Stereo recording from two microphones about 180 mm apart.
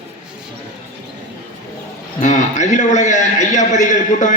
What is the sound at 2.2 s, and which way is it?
A man's voice, 40° left (ahead or behind).